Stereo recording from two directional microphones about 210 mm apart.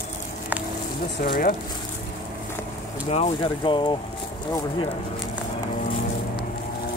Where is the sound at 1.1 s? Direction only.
45° left (ahead or behind).